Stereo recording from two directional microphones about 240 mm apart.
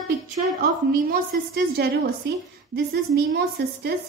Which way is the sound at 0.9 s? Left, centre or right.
Right.